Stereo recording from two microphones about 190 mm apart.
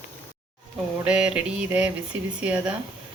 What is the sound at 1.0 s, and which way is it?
Speech, 5° right (ahead or behind).